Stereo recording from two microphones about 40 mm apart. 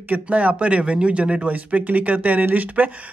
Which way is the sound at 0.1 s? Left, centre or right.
Right.